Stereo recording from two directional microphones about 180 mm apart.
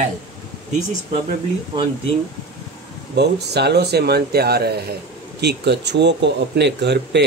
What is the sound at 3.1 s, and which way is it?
Speech, 70° right (ahead or behind).